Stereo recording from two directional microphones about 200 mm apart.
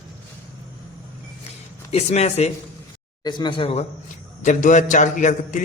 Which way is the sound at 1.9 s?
30° left (ahead or behind).